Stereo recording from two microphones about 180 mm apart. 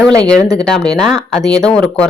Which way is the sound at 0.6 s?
5° left (ahead or behind).